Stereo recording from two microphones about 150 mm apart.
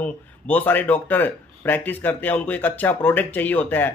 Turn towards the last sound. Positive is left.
turn(degrees=10)  # may be behind; listen again after turning